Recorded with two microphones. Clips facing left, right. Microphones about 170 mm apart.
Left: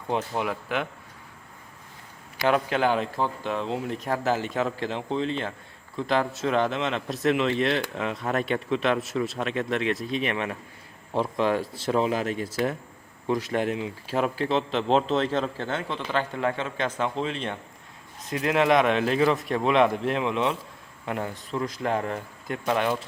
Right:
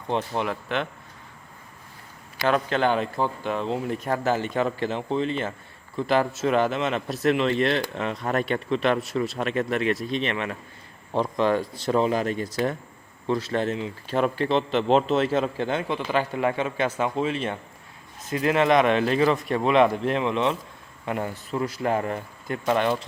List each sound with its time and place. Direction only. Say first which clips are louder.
0.1 s speech: right 1 dB; 5° left (ahead or behind)
2.4 s speech: even; 15° left (ahead or behind)
10.3 s speech: even; 15° left (ahead or behind)
11.1 s speech: right 2 dB; 5° left (ahead or behind)
14.2 s a man's voice: right 2 dB; centre (ahead or behind)